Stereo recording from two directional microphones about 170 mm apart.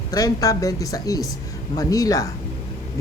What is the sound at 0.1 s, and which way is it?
Speech, 20° left (ahead or behind).